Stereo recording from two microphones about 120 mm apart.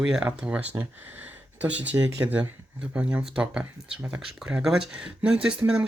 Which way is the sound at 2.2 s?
25° right (ahead or behind).